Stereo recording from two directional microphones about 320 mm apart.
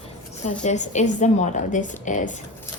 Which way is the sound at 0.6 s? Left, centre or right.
Left.